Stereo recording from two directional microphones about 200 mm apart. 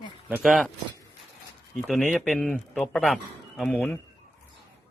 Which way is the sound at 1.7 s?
Centre (ahead or behind).